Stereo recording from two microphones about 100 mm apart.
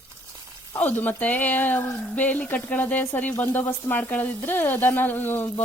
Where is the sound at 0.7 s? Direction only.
20° left (ahead or behind).